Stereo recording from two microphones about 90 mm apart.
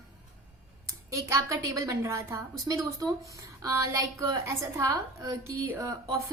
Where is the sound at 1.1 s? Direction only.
40° right (ahead or behind).